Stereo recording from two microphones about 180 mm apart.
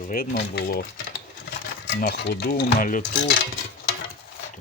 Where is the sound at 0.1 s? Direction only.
60° left (ahead or behind).